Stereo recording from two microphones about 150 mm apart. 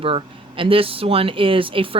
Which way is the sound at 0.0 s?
35° right (ahead or behind).